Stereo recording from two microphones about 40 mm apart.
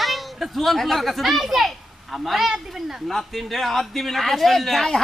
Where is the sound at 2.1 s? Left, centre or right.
Centre.